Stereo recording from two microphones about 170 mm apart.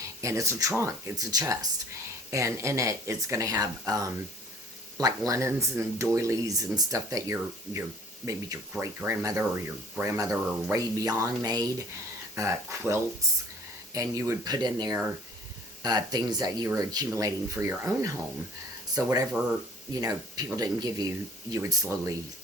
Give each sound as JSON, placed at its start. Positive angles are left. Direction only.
{"t": 0.2, "sound": "speech", "side_deg": -20}